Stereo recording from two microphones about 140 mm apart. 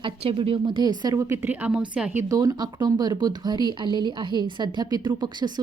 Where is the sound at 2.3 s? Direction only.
25° right (ahead or behind).